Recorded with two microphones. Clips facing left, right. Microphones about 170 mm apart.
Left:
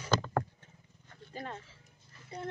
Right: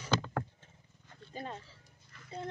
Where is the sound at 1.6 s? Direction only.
35° right (ahead or behind).